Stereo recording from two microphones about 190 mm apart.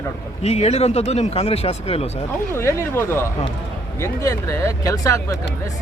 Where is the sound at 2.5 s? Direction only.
15° left (ahead or behind).